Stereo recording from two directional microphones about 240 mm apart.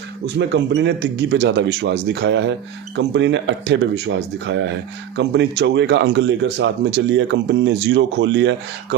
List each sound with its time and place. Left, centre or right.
0.3 s speech: right